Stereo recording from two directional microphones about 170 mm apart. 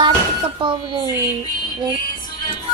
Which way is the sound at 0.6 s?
30° right (ahead or behind).